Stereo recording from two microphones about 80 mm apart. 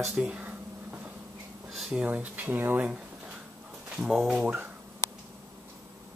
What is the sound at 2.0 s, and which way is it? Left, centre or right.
Speech, centre.